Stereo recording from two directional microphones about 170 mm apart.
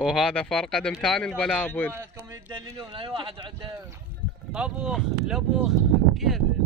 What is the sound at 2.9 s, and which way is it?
Speech, 30° right (ahead or behind).